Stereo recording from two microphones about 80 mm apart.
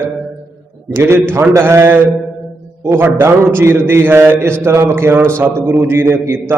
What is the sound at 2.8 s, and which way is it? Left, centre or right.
Mantra, right.